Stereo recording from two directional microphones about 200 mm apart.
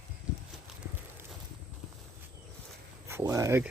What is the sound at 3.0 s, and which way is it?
Speech, 15° right (ahead or behind).